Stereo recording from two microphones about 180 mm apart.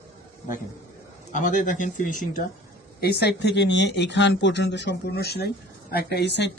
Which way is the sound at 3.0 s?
65° left (ahead or behind).